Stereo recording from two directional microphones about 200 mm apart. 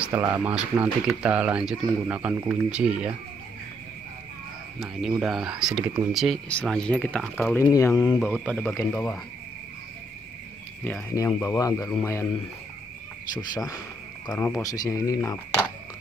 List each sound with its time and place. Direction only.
0.3 s speech: 10° right (ahead or behind)
4.7 s speech: 5° right (ahead or behind)
7.5 s speech: 15° left (ahead or behind)
8.5 s speech: 5° left (ahead or behind)
10.8 s speech: 10° left (ahead or behind)
13.3 s speech: 20° left (ahead or behind)
14.3 s speech: 5° left (ahead or behind)
14.6 s speech: 15° left (ahead or behind)